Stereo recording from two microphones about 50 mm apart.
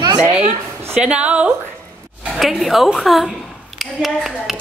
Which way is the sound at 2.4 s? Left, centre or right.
Centre.